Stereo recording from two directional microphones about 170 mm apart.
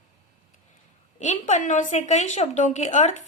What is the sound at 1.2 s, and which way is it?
A woman's voice, 45° left (ahead or behind).